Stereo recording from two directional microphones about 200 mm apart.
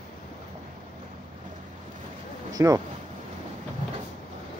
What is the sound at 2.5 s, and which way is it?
Speech, 20° right (ahead or behind).